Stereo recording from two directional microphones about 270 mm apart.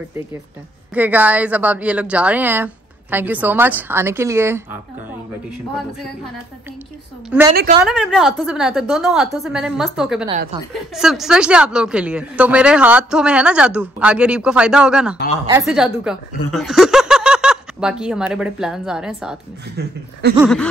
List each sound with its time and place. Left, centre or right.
0.9 s speech: centre
7.2 s a woman's voice: centre
19.8 s speech: right